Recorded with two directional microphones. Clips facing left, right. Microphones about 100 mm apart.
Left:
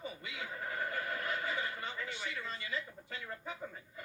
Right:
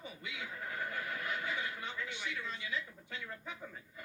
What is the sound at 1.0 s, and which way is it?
Speech, 35° left (ahead or behind).